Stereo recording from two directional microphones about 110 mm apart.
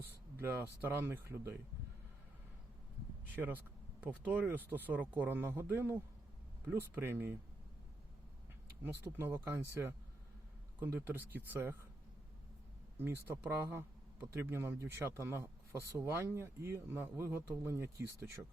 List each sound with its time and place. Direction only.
0.4 s speech: 20° right (ahead or behind)
3.3 s speech: 15° right (ahead or behind)
8.8 s speech: 20° right (ahead or behind)
10.8 s speech: 20° right (ahead or behind)
13.0 s speech: 20° right (ahead or behind)